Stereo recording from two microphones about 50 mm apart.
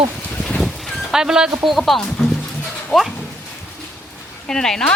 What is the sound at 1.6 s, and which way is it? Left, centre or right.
Speech, centre.